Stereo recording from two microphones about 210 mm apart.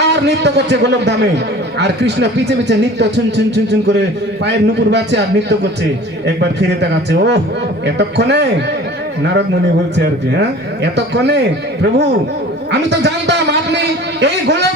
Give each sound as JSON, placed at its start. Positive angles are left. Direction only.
{"t": 0.0, "sound": "a man's voice", "side_deg": -55}
{"t": 9.9, "sound": "a man's voice", "side_deg": -55}